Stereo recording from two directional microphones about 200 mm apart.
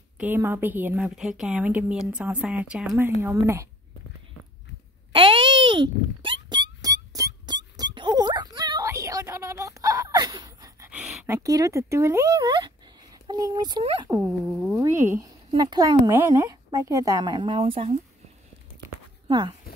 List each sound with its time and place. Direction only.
0.2 s a woman's voice: 10° right (ahead or behind)
5.1 s wail: 25° right (ahead or behind)
10.9 s a sound: 5° right (ahead or behind)
11.2 s a woman's voice: 15° right (ahead or behind); by 17.9 s 30° right (ahead or behind)
19.2 s speech: 20° right (ahead or behind)